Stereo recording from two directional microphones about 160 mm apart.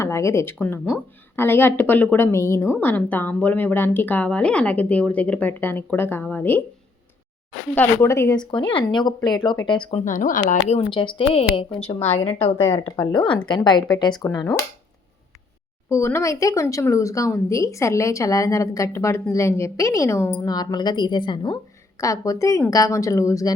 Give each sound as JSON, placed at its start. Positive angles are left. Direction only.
{"t": 0.0, "sound": "speech", "side_deg": 15}
{"t": 7.8, "sound": "speech", "side_deg": 15}
{"t": 8.4, "sound": "speech", "side_deg": 30}
{"t": 9.9, "sound": "speech", "side_deg": 50}
{"t": 10.8, "sound": "a woman's voice", "side_deg": 30}
{"t": 12.5, "sound": "speech", "side_deg": 15}
{"t": 13.1, "sound": "speech", "side_deg": 30}
{"t": 15.9, "sound": "speech", "side_deg": 15}